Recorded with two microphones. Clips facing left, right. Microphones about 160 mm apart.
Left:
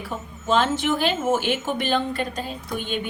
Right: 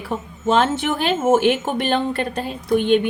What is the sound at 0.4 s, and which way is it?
A woman's voice, 55° right (ahead or behind).